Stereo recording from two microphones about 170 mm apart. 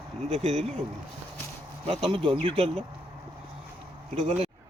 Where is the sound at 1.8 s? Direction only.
30° right (ahead or behind).